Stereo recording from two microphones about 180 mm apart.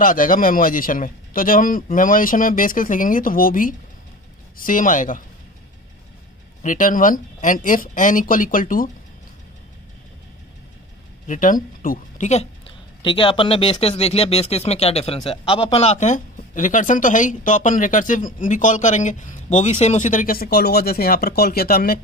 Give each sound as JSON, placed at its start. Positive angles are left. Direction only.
{"t": 0.0, "sound": "speech", "side_deg": 50}
{"t": 6.6, "sound": "speech", "side_deg": 45}
{"t": 11.2, "sound": "speech", "side_deg": 50}